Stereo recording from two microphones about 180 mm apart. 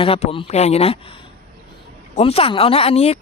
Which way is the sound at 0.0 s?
35° left (ahead or behind).